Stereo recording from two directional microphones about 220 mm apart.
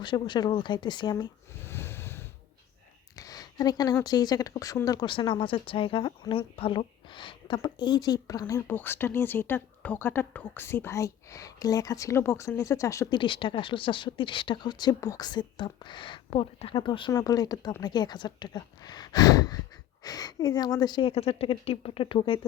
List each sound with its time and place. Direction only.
0.0 s a woman's voice: 20° left (ahead or behind)